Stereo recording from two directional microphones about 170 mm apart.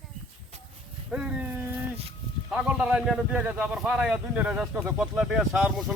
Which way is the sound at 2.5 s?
5° right (ahead or behind).